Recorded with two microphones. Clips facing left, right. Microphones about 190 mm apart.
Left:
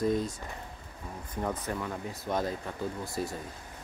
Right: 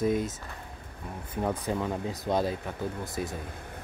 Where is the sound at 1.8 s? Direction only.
25° right (ahead or behind).